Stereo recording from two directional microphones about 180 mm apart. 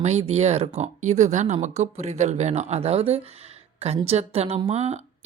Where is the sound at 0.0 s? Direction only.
35° right (ahead or behind).